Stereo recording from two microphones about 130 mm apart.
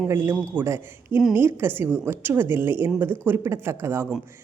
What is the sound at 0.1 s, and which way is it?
A man's voice, 20° right (ahead or behind).